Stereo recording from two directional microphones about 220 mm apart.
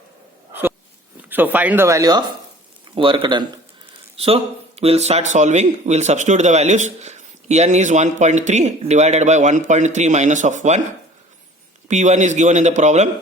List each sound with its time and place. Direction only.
1.3 s a man's voice: 10° right (ahead or behind); by 10.8 s 35° right (ahead or behind)
11.9 s a man's voice: 30° right (ahead or behind)